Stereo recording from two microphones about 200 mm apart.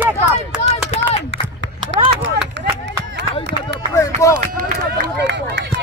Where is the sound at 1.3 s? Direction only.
70° right (ahead or behind).